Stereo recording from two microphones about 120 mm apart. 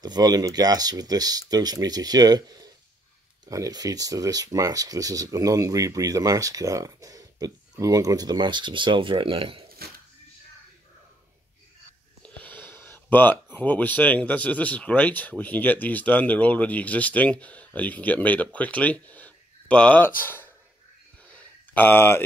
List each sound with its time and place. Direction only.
0.0 s speech: 35° right (ahead or behind); by 9.7 s 50° right (ahead or behind)
12.2 s speech: 10° left (ahead or behind)
21.3 s a sound: 10° left (ahead or behind)